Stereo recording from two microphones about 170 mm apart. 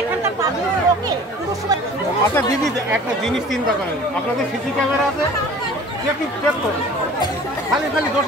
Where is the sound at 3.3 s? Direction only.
Centre (ahead or behind).